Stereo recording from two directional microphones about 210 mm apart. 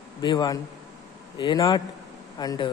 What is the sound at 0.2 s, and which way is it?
Speech, 20° left (ahead or behind).